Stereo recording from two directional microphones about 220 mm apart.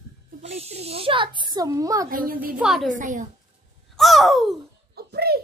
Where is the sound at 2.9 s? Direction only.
35° right (ahead or behind).